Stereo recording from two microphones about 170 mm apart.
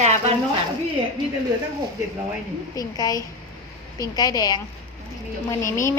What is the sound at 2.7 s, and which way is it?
Speech, 20° left (ahead or behind).